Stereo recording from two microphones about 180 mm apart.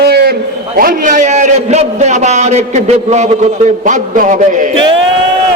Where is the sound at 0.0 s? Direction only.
60° right (ahead or behind).